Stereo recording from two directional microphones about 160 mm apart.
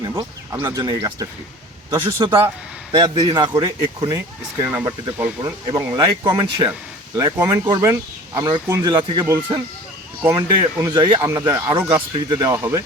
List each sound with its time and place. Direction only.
0.1 s speech: 15° right (ahead or behind)
4.6 s speech: 15° right (ahead or behind)